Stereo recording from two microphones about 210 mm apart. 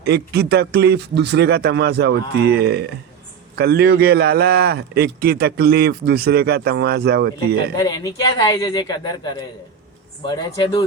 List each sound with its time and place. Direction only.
0.0 s a man's voice: 50° right (ahead or behind)
7.8 s speech: 20° left (ahead or behind)